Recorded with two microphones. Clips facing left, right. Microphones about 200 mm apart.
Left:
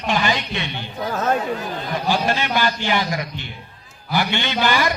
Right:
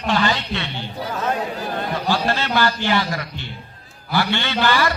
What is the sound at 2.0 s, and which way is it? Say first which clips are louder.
A man's voice: left 2 dB; 15° left (ahead or behind).